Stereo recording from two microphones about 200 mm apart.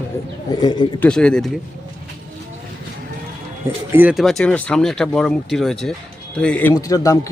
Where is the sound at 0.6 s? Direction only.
20° left (ahead or behind).